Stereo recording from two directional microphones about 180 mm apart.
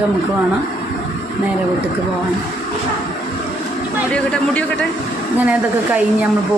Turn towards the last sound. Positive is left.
turn(degrees=5)  # may be behind; listen again after turning